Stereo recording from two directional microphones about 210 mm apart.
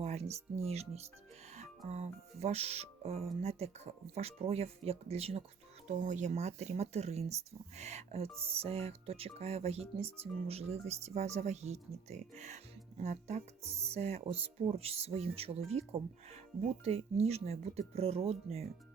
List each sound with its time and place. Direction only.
0.0 s speech: 30° right (ahead or behind)